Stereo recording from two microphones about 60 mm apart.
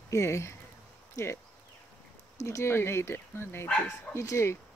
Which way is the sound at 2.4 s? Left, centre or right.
Left.